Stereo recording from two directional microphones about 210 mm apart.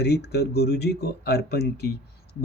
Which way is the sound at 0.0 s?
50° left (ahead or behind).